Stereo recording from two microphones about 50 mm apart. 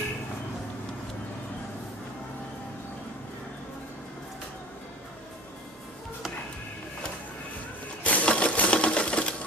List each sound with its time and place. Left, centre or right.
8.0 s sewing machine: left